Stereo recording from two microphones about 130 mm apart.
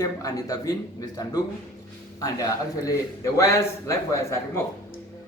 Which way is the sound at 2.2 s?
25° left (ahead or behind).